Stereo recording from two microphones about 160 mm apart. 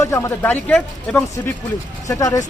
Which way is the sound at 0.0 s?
20° left (ahead or behind).